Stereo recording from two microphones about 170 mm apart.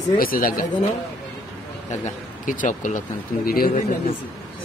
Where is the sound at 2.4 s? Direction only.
50° left (ahead or behind).